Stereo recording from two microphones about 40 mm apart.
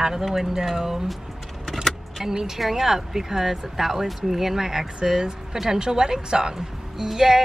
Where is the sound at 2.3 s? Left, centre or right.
Centre.